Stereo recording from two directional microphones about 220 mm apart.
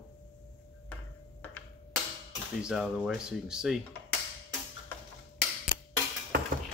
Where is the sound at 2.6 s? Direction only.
Centre (ahead or behind).